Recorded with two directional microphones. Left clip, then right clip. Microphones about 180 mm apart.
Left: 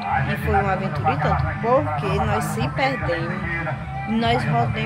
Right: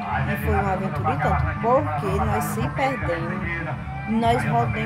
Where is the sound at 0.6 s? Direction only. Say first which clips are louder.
Left 2 dB; 15° right (ahead or behind).